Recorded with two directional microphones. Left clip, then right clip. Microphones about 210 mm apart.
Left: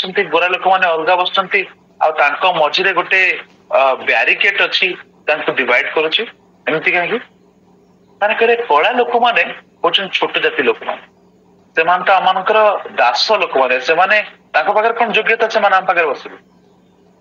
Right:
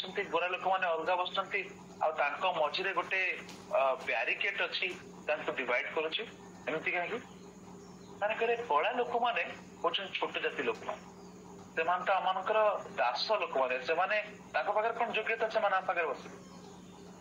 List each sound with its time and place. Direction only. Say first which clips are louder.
0.0 s a man's voice: left 19 dB; 40° left (ahead or behind)